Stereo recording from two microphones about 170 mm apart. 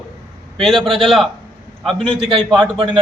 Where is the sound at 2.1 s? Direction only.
30° right (ahead or behind).